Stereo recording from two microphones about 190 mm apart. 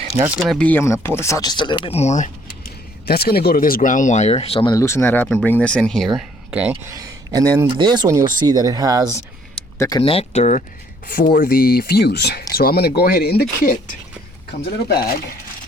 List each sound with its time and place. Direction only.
0.1 s speech: 15° right (ahead or behind)
0.4 s speech: 5° left (ahead or behind); by 2.3 s 40° left (ahead or behind)
3.1 s speech: 55° left (ahead or behind); by 4.7 s 30° left (ahead or behind)
4.7 s speech: 15° left (ahead or behind); by 6.9 s 5° right (ahead or behind)
6.9 s speech: 20° right (ahead or behind)
9.7 s speech: 15° left (ahead or behind)
10.0 s speech: 30° left (ahead or behind)
11.0 s speech: 45° left (ahead or behind)